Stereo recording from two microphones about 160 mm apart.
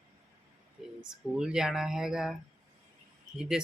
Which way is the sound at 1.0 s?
5° right (ahead or behind).